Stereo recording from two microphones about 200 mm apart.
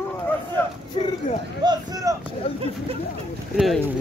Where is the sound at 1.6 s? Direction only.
20° right (ahead or behind).